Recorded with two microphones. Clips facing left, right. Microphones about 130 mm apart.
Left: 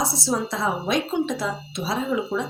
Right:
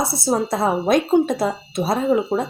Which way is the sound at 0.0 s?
60° right (ahead or behind).